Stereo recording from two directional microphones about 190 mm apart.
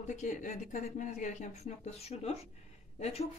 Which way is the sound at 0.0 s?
40° left (ahead or behind).